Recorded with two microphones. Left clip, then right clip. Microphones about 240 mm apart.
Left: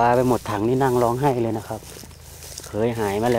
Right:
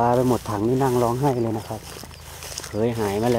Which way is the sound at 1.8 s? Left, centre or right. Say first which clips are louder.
Right 3 dB; centre.